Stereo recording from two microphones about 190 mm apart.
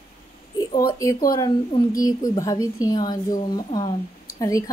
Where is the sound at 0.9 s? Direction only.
15° left (ahead or behind).